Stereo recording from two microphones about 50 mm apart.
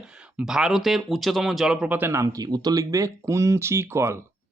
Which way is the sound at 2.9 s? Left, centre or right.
Right.